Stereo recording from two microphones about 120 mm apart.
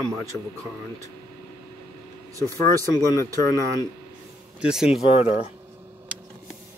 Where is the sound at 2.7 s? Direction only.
30° right (ahead or behind).